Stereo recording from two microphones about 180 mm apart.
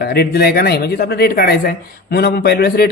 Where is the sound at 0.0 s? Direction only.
60° left (ahead or behind).